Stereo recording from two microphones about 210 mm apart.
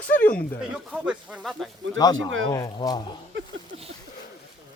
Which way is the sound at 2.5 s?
20° left (ahead or behind).